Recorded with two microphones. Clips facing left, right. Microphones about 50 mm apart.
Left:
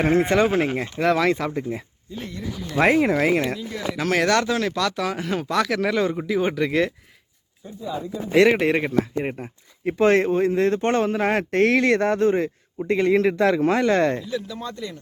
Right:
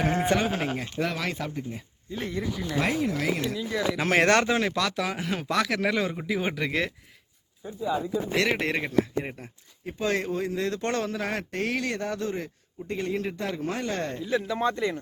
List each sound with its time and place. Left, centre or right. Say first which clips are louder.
0.0 s speech: left 6 dB; left
2.7 s speech: left 9 dB; left
3.2 s a man's voice: left 8 dB; left
3.9 s speech: left 2 dB; right; by 6.9 s centre
7.6 s speech: right 3 dB; centre
8.4 s speech: left 11 dB; centre
9.8 s a man's voice: left 10 dB; left
14.3 s speech: right 4 dB; right